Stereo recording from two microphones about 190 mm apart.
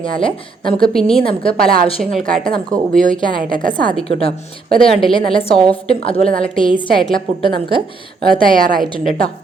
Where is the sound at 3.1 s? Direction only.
25° left (ahead or behind).